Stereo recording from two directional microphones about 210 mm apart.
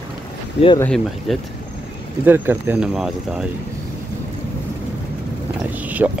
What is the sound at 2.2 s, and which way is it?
Speech, 10° right (ahead or behind).